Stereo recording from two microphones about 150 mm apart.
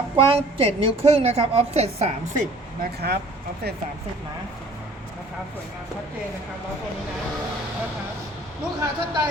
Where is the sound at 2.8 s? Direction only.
90° right.